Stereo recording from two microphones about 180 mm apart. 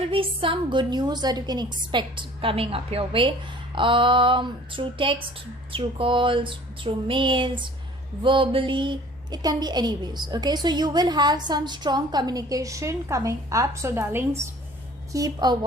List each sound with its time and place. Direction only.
0.1 s a woman's voice: 30° right (ahead or behind)